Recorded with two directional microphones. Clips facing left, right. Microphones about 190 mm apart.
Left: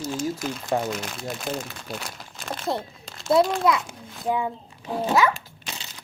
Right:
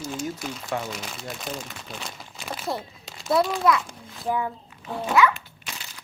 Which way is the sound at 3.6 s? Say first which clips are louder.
Even; 20° left (ahead or behind).